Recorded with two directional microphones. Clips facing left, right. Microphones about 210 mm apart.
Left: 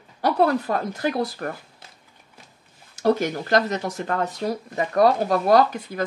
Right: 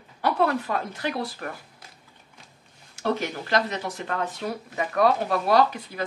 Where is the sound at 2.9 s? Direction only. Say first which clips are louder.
Left 6 dB; 40° left (ahead or behind).